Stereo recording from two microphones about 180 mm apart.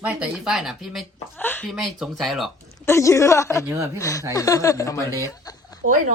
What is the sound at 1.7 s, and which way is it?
Speech, centre (ahead or behind).